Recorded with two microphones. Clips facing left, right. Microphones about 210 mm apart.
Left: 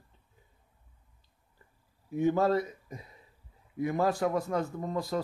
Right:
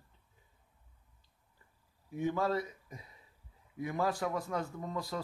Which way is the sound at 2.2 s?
45° left (ahead or behind).